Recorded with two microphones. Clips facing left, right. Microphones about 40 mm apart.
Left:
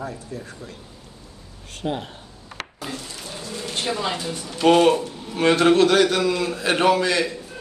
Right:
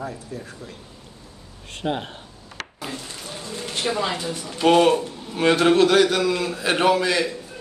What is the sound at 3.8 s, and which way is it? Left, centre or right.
Speech, right.